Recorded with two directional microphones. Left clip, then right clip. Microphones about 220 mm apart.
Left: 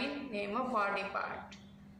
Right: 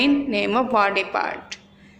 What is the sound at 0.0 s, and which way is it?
A woman's voice, 40° right (ahead or behind).